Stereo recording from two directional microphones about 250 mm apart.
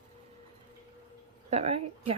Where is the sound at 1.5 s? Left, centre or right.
Right.